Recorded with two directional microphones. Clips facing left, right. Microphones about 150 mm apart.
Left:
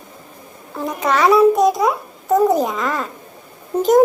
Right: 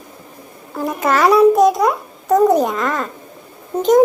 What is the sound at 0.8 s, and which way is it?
Babbling, centre (ahead or behind).